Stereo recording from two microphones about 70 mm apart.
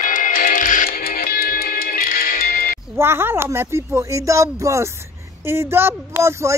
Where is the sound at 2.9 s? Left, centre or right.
Right.